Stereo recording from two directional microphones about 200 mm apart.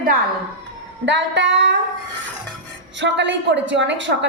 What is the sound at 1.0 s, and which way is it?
Speech, 65° right (ahead or behind).